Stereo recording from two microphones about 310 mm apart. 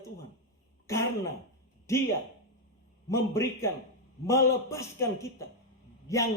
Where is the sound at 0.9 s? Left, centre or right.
Centre.